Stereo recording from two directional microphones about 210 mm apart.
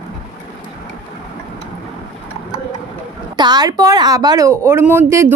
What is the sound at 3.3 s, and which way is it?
A woman's voice, 20° right (ahead or behind).